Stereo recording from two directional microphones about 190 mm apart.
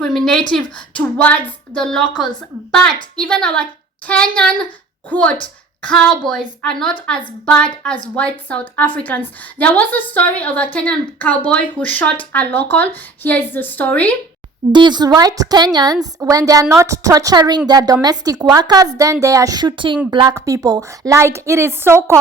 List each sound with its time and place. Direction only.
0.0 s a woman's voice: centre (ahead or behind)
14.7 s a woman's voice: 25° right (ahead or behind)